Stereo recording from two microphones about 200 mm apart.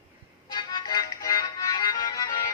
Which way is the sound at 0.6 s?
20° left (ahead or behind).